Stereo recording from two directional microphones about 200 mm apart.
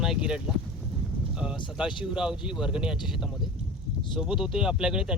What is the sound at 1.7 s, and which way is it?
Speech, 5° right (ahead or behind).